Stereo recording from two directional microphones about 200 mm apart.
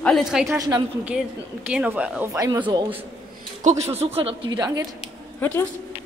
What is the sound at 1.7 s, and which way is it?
Speech, 5° right (ahead or behind).